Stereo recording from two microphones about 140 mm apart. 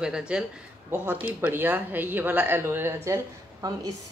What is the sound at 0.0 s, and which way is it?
Speech, 5° right (ahead or behind).